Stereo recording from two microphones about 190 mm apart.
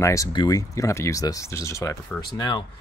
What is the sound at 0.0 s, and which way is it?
Speech, 15° left (ahead or behind).